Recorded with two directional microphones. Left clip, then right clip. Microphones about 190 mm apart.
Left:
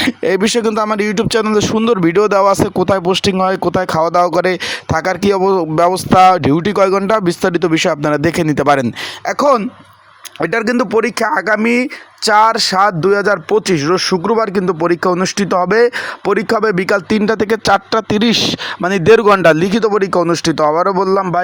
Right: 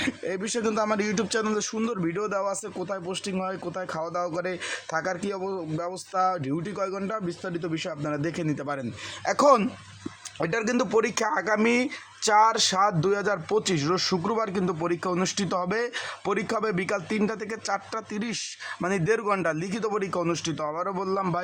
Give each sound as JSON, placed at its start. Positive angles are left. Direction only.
{"t": 0.0, "sound": "speech", "side_deg": 45}
{"t": 9.2, "sound": "speech", "side_deg": 20}
{"t": 10.4, "sound": "speech", "side_deg": 40}